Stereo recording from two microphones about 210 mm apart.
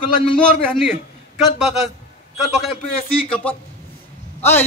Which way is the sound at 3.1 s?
25° left (ahead or behind).